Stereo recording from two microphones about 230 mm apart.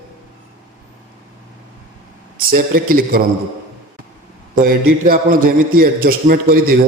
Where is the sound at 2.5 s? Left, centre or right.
Right.